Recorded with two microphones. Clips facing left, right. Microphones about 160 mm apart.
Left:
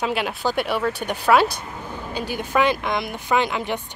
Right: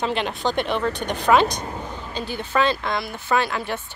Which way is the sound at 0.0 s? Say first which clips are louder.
Even; 5° left (ahead or behind).